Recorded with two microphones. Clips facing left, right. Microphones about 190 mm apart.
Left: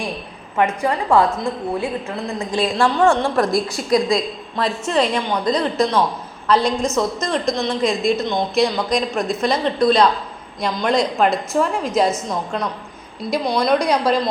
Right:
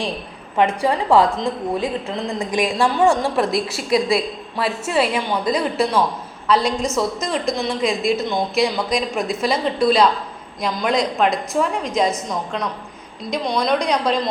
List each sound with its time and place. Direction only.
0.5 s a woman's voice: 15° right (ahead or behind)
2.7 s a woman's voice: centre (ahead or behind)